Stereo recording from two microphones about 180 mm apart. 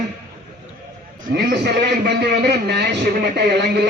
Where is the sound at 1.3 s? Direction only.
65° right (ahead or behind).